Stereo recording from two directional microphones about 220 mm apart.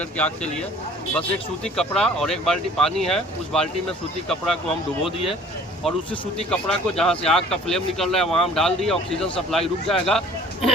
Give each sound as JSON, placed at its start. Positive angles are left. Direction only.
{"t": 0.2, "sound": "speech", "side_deg": 5}
{"t": 5.8, "sound": "speech", "side_deg": 5}